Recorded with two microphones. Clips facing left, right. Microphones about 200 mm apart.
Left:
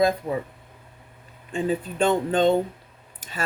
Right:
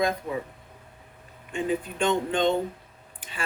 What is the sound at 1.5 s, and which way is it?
Speech, 35° left (ahead or behind).